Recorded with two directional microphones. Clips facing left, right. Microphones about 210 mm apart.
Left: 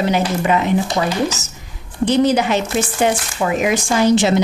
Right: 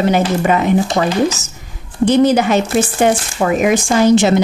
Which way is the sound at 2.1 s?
50° right (ahead or behind).